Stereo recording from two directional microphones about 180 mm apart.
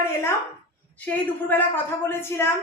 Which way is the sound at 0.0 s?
15° left (ahead or behind).